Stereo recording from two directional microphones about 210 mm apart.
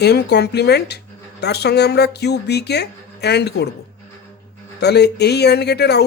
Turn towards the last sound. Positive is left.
turn(degrees=50)  # may be behind; listen again after turning